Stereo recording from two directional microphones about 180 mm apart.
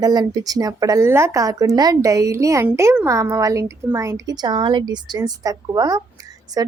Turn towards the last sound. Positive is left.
turn(degrees=-20)  # may be behind; listen again after turning